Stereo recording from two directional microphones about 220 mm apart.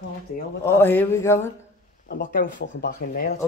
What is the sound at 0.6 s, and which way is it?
Speech, 10° left (ahead or behind).